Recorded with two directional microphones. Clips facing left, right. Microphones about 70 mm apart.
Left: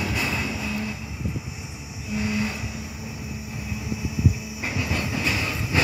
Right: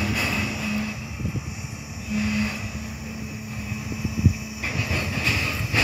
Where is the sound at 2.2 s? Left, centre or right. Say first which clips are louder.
Even; centre.